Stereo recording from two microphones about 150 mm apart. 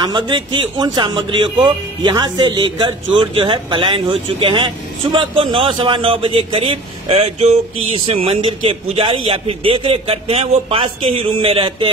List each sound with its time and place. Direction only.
0.0 s a man's voice: 30° right (ahead or behind)